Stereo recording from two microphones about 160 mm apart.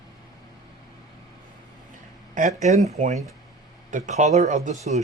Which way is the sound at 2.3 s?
50° right (ahead or behind).